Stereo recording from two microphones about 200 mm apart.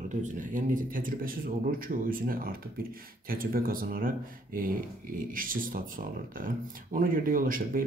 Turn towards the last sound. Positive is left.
turn(degrees=-45)  # may be behind; listen again after turning